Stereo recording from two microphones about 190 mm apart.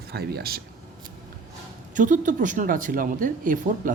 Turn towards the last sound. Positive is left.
turn(degrees=-45)  # may be behind; listen again after turning